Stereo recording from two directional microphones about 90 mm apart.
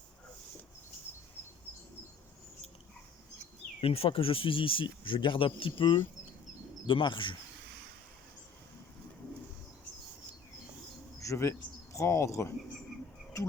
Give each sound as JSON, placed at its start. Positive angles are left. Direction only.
{"t": 3.8, "sound": "speech", "side_deg": 90}
{"t": 11.2, "sound": "speech", "side_deg": 35}